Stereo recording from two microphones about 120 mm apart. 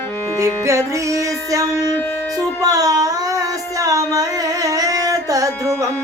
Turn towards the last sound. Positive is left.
turn(degrees=-30)  # may be behind; listen again after turning